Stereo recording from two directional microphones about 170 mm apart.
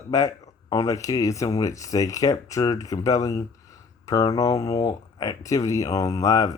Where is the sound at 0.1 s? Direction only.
20° left (ahead or behind).